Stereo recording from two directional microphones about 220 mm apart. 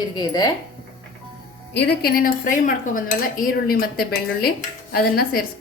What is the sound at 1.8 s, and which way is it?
A woman's voice, 45° left (ahead or behind).